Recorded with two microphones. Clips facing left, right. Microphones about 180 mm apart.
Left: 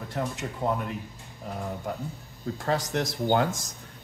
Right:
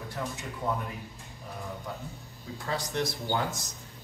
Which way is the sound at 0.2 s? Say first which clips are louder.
Left 5 dB; 60° left (ahead or behind).